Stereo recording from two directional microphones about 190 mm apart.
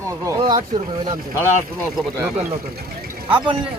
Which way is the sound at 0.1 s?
20° right (ahead or behind).